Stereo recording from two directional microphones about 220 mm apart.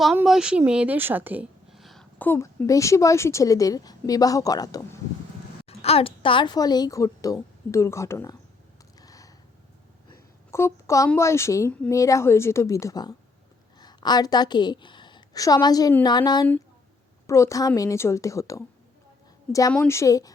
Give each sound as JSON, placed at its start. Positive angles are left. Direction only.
{"t": 0.0, "sound": "a woman's voice", "side_deg": -5}
{"t": 5.6, "sound": "a woman's voice", "side_deg": 25}
{"t": 9.0, "sound": "a sound", "side_deg": 15}
{"t": 10.1, "sound": "a woman's voice", "side_deg": 10}